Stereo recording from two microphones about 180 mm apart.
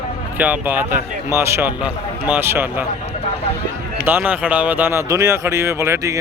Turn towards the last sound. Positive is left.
turn(degrees=-15)  # may be behind; listen again after turning